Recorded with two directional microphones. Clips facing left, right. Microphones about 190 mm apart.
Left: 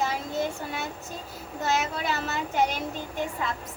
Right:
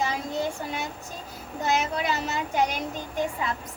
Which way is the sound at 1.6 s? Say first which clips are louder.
Right 2 dB; 15° right (ahead or behind).